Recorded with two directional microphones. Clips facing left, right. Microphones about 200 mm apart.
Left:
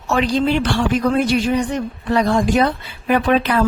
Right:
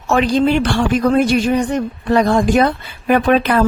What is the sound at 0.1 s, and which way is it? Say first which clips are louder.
A woman's voice: right 3 dB; 50° right (ahead or behind).